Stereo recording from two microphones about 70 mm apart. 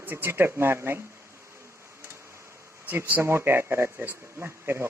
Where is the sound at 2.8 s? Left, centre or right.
Right.